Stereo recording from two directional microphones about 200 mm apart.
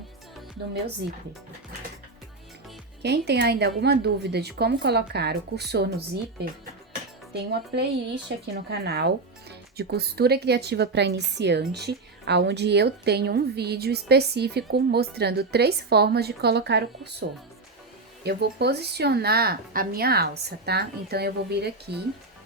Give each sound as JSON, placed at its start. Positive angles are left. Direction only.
{"t": 3.0, "sound": "speech", "side_deg": -55}
{"t": 7.3, "sound": "speech", "side_deg": -55}